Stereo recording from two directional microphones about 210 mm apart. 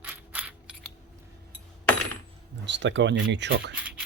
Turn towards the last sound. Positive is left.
turn(degrees=-5)  # may be behind; listen again after turning